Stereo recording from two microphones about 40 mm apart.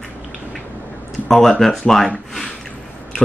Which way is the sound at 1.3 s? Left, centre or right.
Centre.